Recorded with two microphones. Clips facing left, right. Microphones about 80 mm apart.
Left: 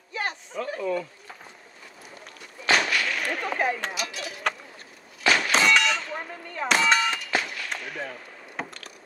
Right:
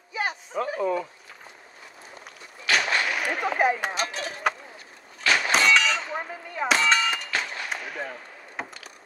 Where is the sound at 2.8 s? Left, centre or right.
Centre.